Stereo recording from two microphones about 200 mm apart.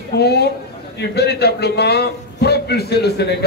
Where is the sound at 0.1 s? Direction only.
55° left (ahead or behind).